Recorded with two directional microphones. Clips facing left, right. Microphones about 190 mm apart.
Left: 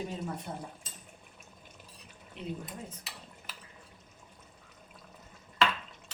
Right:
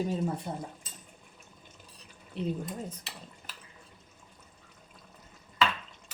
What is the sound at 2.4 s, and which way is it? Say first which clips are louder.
Speech: right 8 dB; 35° right (ahead or behind).